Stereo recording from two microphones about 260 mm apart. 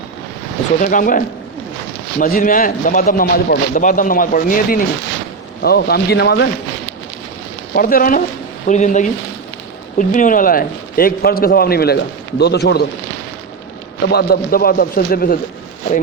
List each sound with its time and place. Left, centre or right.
0.8 s a man's voice: left
7.7 s a man's voice: left
14.0 s a man's voice: left